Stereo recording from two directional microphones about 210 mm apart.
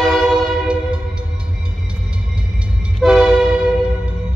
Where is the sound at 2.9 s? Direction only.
Centre (ahead or behind).